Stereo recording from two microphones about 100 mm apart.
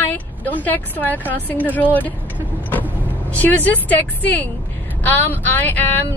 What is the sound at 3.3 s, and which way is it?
Speech, 15° left (ahead or behind).